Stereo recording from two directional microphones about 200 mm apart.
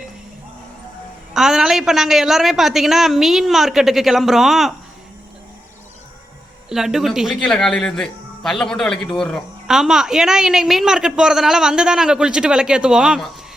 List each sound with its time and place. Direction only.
1.3 s speech: 5° right (ahead or behind)
6.7 s speech: centre (ahead or behind)